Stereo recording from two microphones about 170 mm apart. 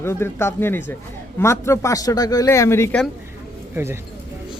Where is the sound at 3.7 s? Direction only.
15° right (ahead or behind).